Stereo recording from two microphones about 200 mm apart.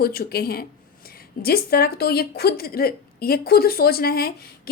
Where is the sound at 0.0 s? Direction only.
50° left (ahead or behind).